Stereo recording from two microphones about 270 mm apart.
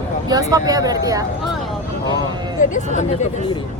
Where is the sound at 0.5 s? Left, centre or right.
Centre.